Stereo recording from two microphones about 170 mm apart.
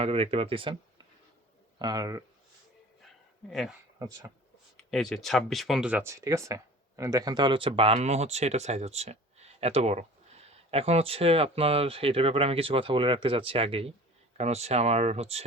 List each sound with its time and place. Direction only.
0.0 s speech: 35° right (ahead or behind)
4.9 s speech: centre (ahead or behind)
6.1 s speech: 15° right (ahead or behind); by 15.4 s 40° right (ahead or behind)